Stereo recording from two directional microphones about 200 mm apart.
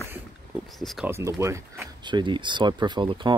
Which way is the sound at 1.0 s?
15° right (ahead or behind).